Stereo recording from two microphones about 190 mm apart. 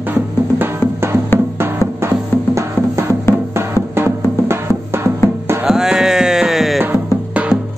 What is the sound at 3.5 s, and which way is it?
Music, 10° right (ahead or behind).